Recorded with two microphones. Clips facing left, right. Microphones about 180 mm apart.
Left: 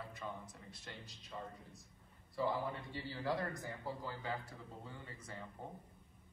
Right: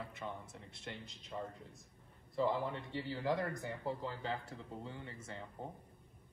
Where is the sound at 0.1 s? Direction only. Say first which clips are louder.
Right 2 dB; 20° right (ahead or behind).